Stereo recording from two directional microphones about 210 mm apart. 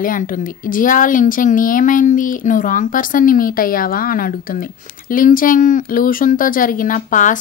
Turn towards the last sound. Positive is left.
turn(degrees=40)  # may be behind; listen again after turning